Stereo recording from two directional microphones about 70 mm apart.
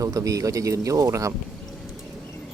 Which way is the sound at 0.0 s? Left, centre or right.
Right.